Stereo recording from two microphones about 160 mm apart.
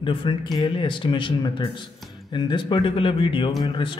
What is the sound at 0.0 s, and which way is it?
A man's voice, 30° left (ahead or behind).